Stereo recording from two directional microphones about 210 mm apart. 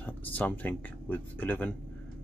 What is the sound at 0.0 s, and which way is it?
Speech, 10° left (ahead or behind).